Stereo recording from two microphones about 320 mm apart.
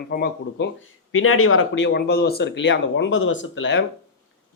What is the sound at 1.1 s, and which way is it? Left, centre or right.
Speech, left.